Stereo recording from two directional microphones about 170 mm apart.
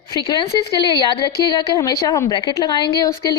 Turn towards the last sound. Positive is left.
turn(degrees=25)  # may be behind; listen again after turning